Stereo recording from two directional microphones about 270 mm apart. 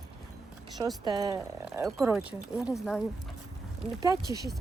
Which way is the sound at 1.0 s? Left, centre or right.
Centre.